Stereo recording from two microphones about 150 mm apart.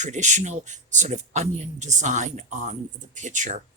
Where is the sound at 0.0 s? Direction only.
50° right (ahead or behind).